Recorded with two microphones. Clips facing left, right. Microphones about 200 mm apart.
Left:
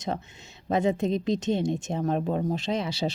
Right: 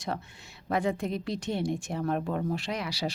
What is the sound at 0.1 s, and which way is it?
A woman's voice, 20° left (ahead or behind).